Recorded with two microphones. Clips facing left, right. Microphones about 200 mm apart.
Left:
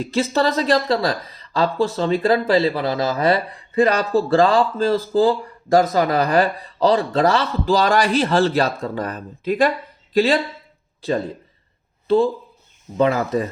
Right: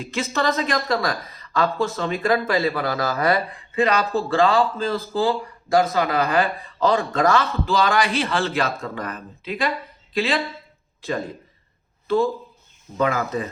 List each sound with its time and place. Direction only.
0.0 s a man's voice: 35° left (ahead or behind)
3.8 s a man's voice: 40° left (ahead or behind)
12.0 s a man's voice: 30° left (ahead or behind)